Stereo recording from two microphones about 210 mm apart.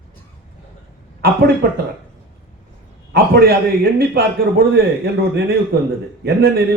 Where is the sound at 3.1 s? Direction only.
50° right (ahead or behind).